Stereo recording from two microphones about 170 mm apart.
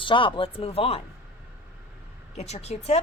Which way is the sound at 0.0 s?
30° left (ahead or behind).